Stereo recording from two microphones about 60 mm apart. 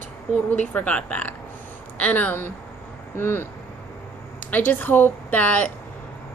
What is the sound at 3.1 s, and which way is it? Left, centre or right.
Speech, left.